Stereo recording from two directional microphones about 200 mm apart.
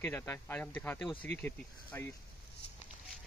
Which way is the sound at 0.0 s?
10° left (ahead or behind).